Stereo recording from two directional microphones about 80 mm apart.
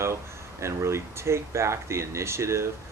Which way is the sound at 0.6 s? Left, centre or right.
Right.